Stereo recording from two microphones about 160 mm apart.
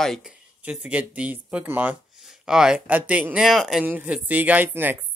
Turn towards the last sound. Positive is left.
turn(degrees=-15)  # may be behind; listen again after turning